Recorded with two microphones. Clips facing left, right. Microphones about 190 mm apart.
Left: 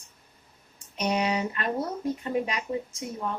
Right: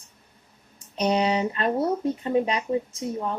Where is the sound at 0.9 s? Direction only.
30° right (ahead or behind).